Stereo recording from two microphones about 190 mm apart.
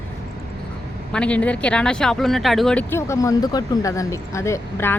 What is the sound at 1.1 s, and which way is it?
Speech, 5° left (ahead or behind).